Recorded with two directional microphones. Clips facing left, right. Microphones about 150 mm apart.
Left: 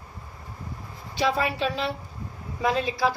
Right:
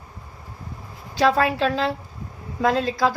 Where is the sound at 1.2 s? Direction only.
90° right.